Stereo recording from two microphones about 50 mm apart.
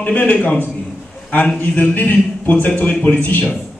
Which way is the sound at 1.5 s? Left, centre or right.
Left.